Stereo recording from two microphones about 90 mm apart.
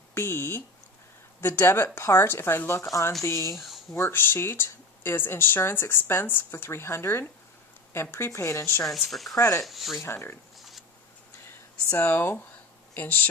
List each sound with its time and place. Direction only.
0.1 s a sound: 30° left (ahead or behind)
1.4 s speech: 25° left (ahead or behind)
3.5 s speech: centre (ahead or behind)
3.9 s speech: 25° left (ahead or behind)
8.9 s speech: centre (ahead or behind)
9.3 s speech: 40° left (ahead or behind)
9.6 s speech: centre (ahead or behind)
10.0 s speech: 30° left (ahead or behind)
10.6 s a sound: centre (ahead or behind)
11.9 s speech: 25° left (ahead or behind)